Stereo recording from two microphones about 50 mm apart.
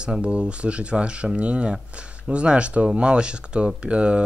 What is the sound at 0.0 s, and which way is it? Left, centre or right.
Speech, right.